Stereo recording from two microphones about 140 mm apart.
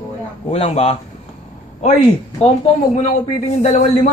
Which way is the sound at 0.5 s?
45° left (ahead or behind).